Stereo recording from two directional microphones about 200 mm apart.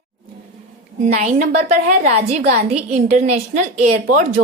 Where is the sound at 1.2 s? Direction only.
35° right (ahead or behind).